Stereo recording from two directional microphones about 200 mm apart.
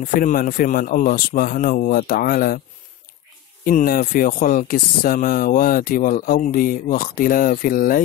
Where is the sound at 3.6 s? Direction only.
45° left (ahead or behind).